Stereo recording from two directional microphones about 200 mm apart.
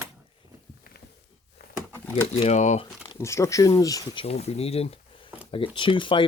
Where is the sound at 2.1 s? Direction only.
30° left (ahead or behind).